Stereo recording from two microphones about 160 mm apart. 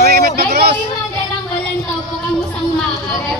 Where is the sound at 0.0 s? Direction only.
70° right (ahead or behind).